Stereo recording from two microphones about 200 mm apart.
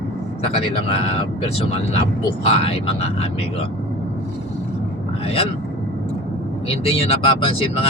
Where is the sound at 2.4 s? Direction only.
30° left (ahead or behind).